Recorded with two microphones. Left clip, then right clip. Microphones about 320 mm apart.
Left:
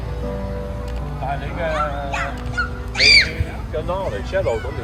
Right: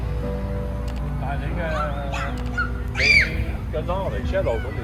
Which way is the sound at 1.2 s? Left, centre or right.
Left.